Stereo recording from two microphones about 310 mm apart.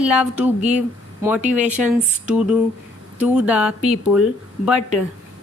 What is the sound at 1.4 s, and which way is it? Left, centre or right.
Speech, right.